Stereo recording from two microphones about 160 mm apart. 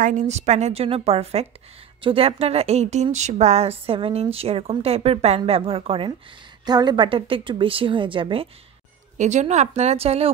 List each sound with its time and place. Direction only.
0.0 s speech: 50° right (ahead or behind); by 8.5 s 35° right (ahead or behind)
9.2 s speech: 45° right (ahead or behind)